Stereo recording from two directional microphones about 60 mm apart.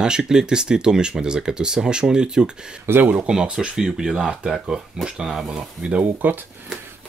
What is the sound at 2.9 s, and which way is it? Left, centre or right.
Speech, right.